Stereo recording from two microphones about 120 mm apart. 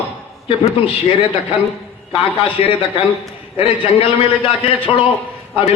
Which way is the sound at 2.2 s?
50° left (ahead or behind).